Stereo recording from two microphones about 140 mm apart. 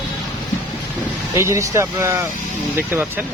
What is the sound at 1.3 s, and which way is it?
Speech, 20° right (ahead or behind).